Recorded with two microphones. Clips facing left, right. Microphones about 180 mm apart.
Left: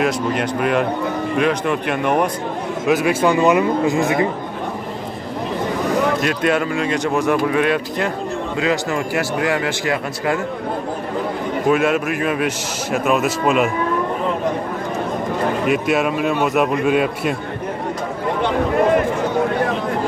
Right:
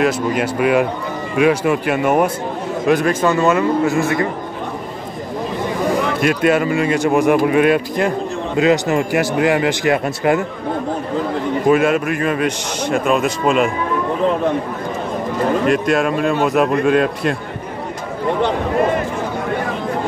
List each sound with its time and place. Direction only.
0.0 s a man's voice: 5° right (ahead or behind)
2.8 s a man's voice: 5° left (ahead or behind)
6.2 s a man's voice: 5° right (ahead or behind)
7.6 s speech: 50° right (ahead or behind)
8.5 s a man's voice: 20° right (ahead or behind)
11.6 s a man's voice: centre (ahead or behind)
15.6 s a man's voice: 5° left (ahead or behind)